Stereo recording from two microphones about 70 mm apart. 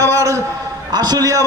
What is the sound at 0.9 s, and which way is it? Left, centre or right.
Speech, right.